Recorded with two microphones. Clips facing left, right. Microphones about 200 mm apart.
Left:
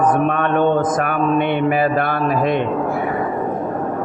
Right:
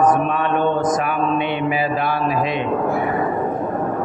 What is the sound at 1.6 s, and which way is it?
Speech, 55° left (ahead or behind).